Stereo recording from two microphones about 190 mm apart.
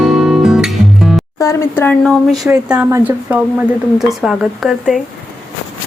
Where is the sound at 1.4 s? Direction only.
15° left (ahead or behind).